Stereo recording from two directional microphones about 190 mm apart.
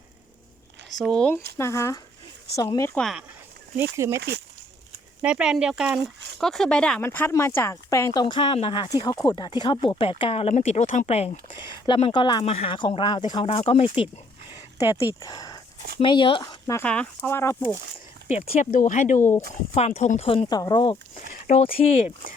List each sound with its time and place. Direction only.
0.9 s speech: centre (ahead or behind)
3.0 s speech: centre (ahead or behind)
3.9 s speech: 15° right (ahead or behind)
4.2 s speech: 60° right (ahead or behind)
5.2 s speech: 5° right (ahead or behind); by 14.1 s 30° left (ahead or behind)
15.2 s speech: 20° left (ahead or behind)
16.8 s speech: 5° left (ahead or behind)
18.4 s speech: 45° left (ahead or behind)
19.2 s speech: 10° left (ahead or behind)
19.7 s speech: 35° left (ahead or behind)
21.3 s speech: 45° left (ahead or behind)
21.6 s speech: 30° left (ahead or behind)